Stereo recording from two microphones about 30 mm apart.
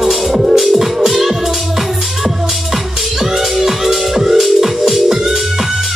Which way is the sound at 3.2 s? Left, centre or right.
Centre.